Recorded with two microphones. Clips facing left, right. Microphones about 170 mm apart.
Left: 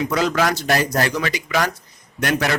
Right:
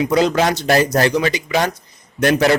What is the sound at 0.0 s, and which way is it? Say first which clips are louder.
A man's voice: right 4 dB; 20° right (ahead or behind).